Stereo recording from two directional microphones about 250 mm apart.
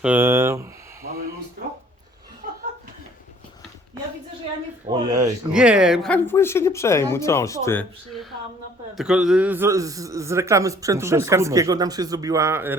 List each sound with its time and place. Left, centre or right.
0.0 s a man's voice: centre
2.4 s chuckle: right
4.9 s a man's voice: centre